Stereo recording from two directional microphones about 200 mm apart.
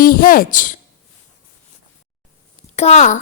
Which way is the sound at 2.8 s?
35° left (ahead or behind).